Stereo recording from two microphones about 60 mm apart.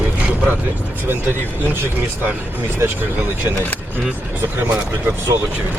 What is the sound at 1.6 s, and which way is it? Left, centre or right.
Speech, right.